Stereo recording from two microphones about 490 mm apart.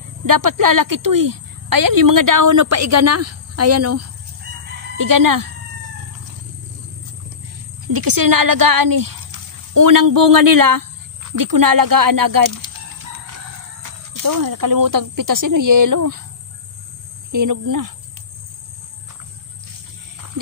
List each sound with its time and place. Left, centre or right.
0.2 s a woman's voice: right
4.9 s a woman's voice: right
7.8 s speech: right
13.8 s a woman's voice: right
17.3 s a woman's voice: right